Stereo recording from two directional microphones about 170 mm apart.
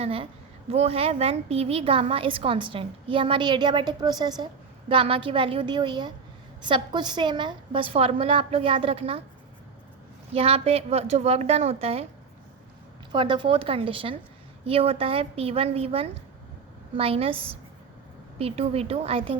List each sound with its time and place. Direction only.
0.0 s a woman's voice: 35° right (ahead or behind)
10.3 s a woman's voice: 35° right (ahead or behind)
13.1 s a woman's voice: 30° right (ahead or behind)